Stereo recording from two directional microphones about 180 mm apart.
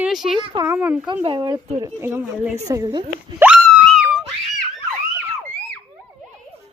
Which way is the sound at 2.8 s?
30° right (ahead or behind).